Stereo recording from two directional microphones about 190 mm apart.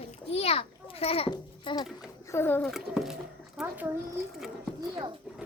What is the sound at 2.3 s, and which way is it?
Speech, 10° left (ahead or behind).